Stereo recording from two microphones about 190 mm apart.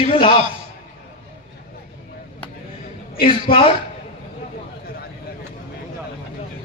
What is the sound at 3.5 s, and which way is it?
Speech, 30° left (ahead or behind).